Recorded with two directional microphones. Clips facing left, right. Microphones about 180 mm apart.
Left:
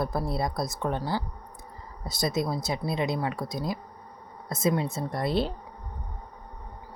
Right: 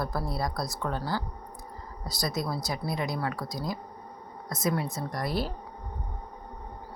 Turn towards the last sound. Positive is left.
turn(degrees=25)  # may be behind; listen again after turning